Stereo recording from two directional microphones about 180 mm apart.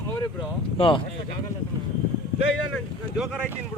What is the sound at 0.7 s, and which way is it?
Speech, 30° left (ahead or behind).